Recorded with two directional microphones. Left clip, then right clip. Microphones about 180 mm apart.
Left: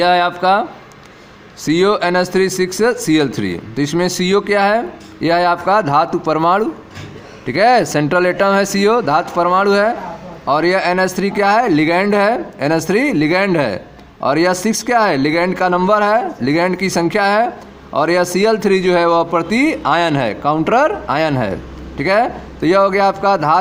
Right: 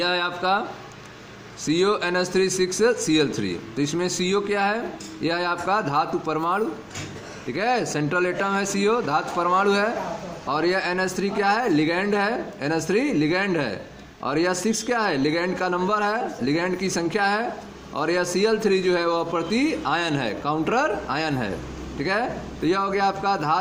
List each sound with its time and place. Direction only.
0.0 s a man's voice: 40° left (ahead or behind)
1.6 s a man's voice: 40° left (ahead or behind)